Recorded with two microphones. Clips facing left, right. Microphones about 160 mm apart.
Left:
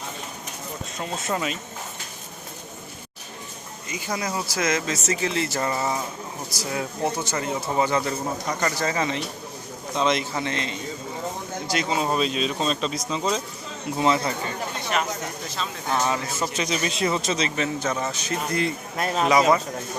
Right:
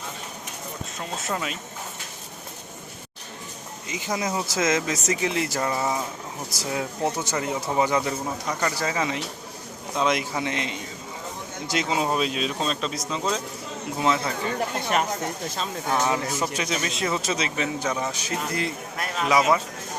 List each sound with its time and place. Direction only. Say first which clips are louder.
0.9 s speech: left 3 dB; centre (ahead or behind)
3.8 s speech: right 1 dB; 20° right (ahead or behind)
5.5 s speech: even; centre (ahead or behind)
6.6 s speech: even; 20° right (ahead or behind); by 13.4 s centre (ahead or behind)
15.9 s speech: right 1 dB; 15° right (ahead or behind)
16.6 s speech: left 2 dB; centre (ahead or behind)
18.9 s speech: left 6 dB; 30° left (ahead or behind)
19.3 s speech: left 1 dB; 5° right (ahead or behind)